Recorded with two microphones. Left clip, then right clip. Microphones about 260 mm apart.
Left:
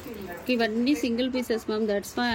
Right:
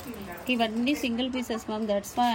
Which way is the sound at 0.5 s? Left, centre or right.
Centre.